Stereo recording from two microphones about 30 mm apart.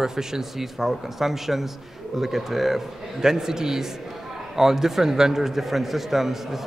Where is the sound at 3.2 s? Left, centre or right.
Centre.